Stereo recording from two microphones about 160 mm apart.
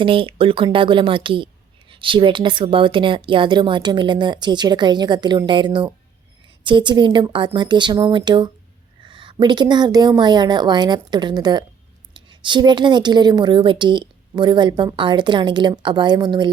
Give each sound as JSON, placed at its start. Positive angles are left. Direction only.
{"t": 0.0, "sound": "a woman's voice", "side_deg": -35}